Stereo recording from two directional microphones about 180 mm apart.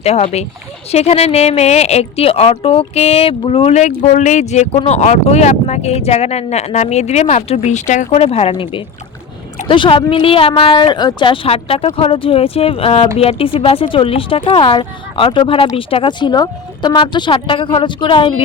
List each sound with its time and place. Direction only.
0.0 s speech: 35° left (ahead or behind)